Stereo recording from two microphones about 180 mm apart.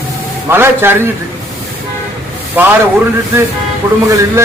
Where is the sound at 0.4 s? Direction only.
15° right (ahead or behind).